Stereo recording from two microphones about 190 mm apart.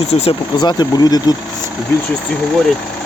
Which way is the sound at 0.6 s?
20° left (ahead or behind).